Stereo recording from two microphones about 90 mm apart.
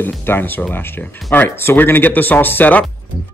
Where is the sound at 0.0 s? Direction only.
20° left (ahead or behind).